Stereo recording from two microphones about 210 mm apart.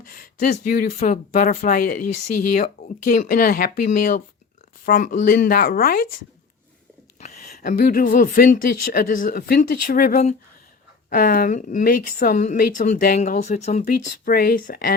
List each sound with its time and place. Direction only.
0.0 s a woman's voice: 40° left (ahead or behind)
7.5 s a woman's voice: 40° left (ahead or behind)